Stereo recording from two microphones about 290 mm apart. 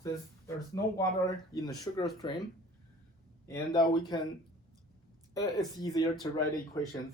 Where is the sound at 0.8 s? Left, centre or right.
Centre.